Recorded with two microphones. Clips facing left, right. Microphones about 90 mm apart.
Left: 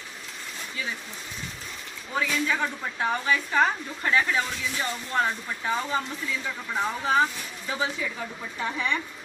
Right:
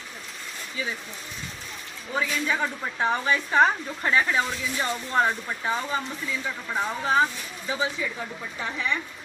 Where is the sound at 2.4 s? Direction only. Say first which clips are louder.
Right 1 dB; 5° right (ahead or behind).